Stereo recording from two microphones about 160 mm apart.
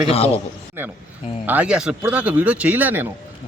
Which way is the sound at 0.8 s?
15° right (ahead or behind).